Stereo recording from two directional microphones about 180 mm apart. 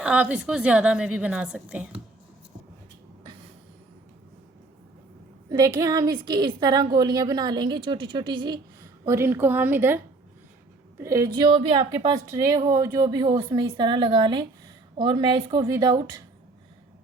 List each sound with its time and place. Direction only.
0.0 s a woman's voice: 10° right (ahead or behind)
5.5 s speech: 20° right (ahead or behind)
9.0 s a woman's voice: 15° right (ahead or behind)
11.3 s speech: 30° right (ahead or behind)